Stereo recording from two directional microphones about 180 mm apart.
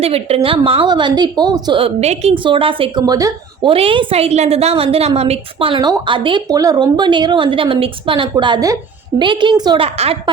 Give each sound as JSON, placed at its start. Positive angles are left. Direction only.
{"t": 0.0, "sound": "a woman's voice", "side_deg": -35}
{"t": 3.7, "sound": "a woman's voice", "side_deg": -30}